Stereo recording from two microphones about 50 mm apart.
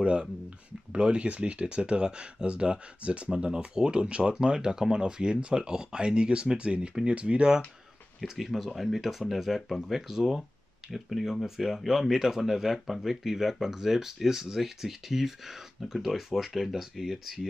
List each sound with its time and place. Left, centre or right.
0.0 s speech: centre
8.2 s speech: centre